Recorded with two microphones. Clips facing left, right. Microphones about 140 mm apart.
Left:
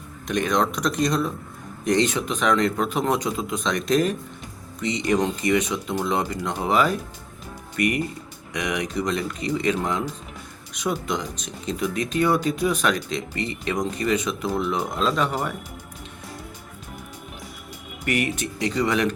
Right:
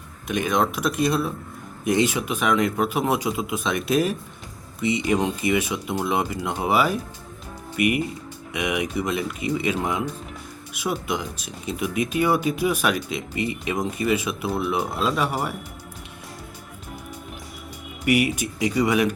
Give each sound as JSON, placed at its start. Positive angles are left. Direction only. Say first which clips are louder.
{"t": 0.3, "sound": "speech", "louder": "even", "side_deg": -5}
{"t": 18.0, "sound": "speech", "louder": "right 4 dB", "side_deg": -10}